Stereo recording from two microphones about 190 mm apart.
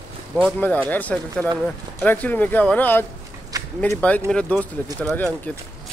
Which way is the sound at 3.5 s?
20° right (ahead or behind).